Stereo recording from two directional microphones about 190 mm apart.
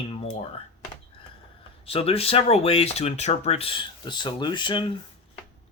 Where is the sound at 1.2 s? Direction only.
25° left (ahead or behind).